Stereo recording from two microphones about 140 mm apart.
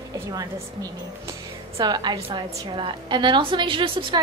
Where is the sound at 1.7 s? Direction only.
30° right (ahead or behind).